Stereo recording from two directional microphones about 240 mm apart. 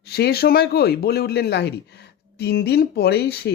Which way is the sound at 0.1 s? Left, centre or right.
Left.